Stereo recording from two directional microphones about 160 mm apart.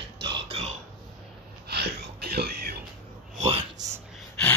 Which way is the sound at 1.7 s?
90° right.